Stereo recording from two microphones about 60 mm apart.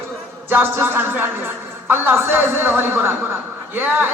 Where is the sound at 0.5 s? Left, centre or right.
Right.